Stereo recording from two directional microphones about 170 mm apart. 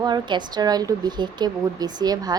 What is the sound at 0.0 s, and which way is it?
A woman's voice, 25° right (ahead or behind).